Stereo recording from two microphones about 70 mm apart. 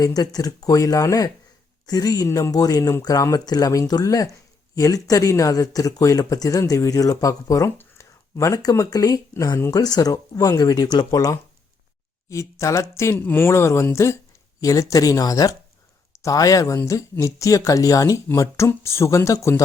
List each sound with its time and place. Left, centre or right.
0.0 s speech: left
1.9 s speech: left
3.4 s speech: left
3.7 s speech: left
7.8 s a sound: left
8.7 s speech: left
12.3 s speech: left
13.1 s speech: left
14.6 s speech: left
18.3 s speech: left